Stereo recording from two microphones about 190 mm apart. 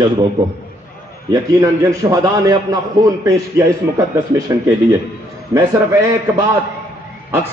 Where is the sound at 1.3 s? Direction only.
15° right (ahead or behind).